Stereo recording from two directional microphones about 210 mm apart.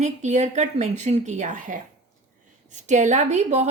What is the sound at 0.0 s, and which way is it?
A woman's voice, 35° right (ahead or behind).